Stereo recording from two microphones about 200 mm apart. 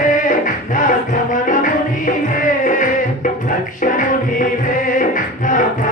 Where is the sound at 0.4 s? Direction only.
40° left (ahead or behind).